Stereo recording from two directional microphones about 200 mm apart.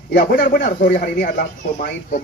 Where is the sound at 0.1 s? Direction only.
50° left (ahead or behind).